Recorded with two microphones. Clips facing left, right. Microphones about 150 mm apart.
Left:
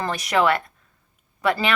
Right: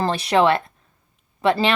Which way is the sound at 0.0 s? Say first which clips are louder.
Right 3 dB; 30° right (ahead or behind).